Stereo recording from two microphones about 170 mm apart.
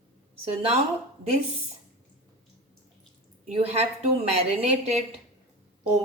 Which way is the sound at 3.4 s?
35° right (ahead or behind).